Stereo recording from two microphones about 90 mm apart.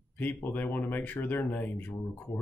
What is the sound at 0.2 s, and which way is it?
Speech, 20° left (ahead or behind).